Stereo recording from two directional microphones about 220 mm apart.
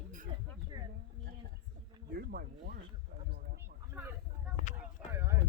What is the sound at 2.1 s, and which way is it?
Speech, 45° right (ahead or behind).